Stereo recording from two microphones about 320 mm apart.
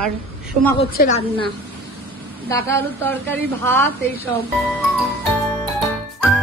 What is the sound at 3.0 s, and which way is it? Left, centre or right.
Speech, centre.